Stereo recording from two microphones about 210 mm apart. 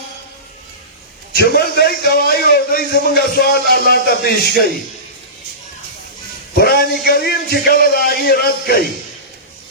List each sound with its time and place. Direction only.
1.4 s a man's voice: 45° left (ahead or behind)
6.6 s a man's voice: 45° left (ahead or behind)